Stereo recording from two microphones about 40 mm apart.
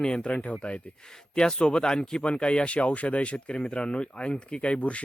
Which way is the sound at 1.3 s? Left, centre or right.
Left.